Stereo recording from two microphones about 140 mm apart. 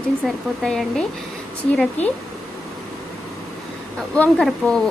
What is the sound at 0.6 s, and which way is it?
Speech, 5° left (ahead or behind).